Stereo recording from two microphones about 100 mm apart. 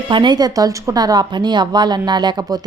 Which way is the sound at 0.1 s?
50° right (ahead or behind).